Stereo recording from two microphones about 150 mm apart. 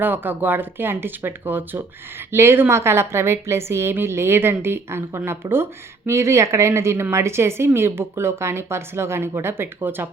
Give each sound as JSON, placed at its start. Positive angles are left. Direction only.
{"t": 0.0, "sound": "speech", "side_deg": -15}